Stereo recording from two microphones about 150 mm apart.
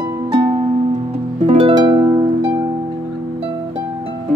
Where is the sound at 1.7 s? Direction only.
30° right (ahead or behind).